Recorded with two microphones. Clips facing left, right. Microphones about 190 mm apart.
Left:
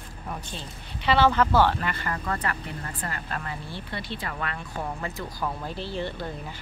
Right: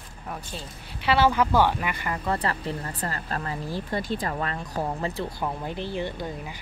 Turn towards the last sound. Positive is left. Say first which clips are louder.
# right 1 dB
turn(degrees=-15)  # may be behind; listen again after turning